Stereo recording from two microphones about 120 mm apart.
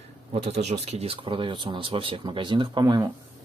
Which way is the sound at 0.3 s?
60° right (ahead or behind).